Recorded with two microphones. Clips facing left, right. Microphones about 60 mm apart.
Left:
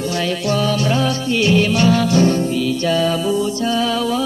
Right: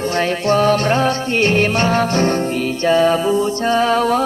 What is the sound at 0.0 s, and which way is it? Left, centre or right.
Music, right.